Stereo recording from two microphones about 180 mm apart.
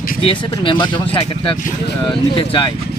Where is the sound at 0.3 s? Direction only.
30° left (ahead or behind).